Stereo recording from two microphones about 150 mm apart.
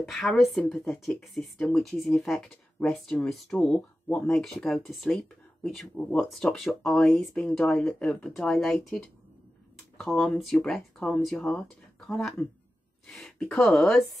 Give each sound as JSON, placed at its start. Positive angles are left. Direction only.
{"t": 0.0, "sound": "speech", "side_deg": 0}